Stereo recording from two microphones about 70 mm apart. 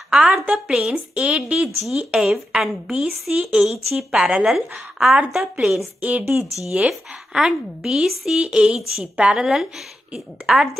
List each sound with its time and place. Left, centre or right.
0.1 s a woman's voice: centre
4.1 s a woman's voice: centre
5.9 s speech: right
6.9 s a woman's voice: centre